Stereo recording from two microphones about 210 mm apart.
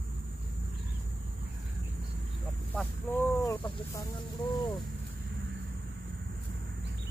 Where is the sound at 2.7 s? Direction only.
10° left (ahead or behind).